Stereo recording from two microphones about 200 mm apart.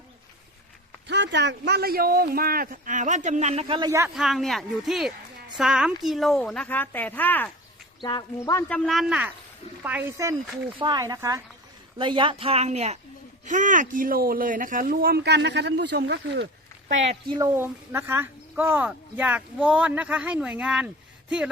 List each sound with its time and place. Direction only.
1.0 s speech: 60° right (ahead or behind); by 4.1 s 15° right (ahead or behind)
4.1 s a woman's voice: centre (ahead or behind)
8.0 s speech: 20° left (ahead or behind)
8.9 s a woman's voice: 5° right (ahead or behind); by 16.5 s 60° right (ahead or behind)
17.1 s speech: 20° right (ahead or behind); by 21.5 s 5° right (ahead or behind)